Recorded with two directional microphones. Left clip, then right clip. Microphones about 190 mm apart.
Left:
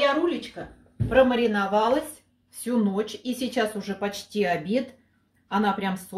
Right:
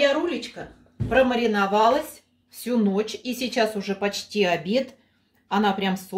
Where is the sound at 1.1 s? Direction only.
20° right (ahead or behind).